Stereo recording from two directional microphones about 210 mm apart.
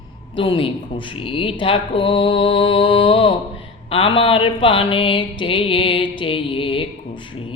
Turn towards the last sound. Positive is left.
turn(degrees=25)  # may be behind; listen again after turning